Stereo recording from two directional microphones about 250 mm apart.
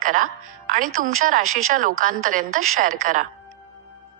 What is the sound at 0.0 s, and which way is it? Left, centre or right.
A woman's voice, right.